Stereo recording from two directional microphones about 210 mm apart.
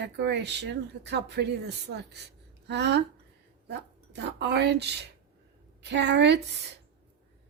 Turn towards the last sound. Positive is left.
turn(degrees=-55)  # may be behind; listen again after turning